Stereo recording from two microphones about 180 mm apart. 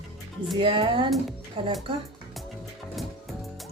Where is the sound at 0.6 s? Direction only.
25° right (ahead or behind).